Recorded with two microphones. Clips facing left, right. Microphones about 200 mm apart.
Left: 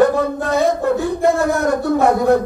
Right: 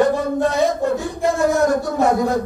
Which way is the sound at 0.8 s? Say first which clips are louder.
Left 3 dB; 60° left (ahead or behind).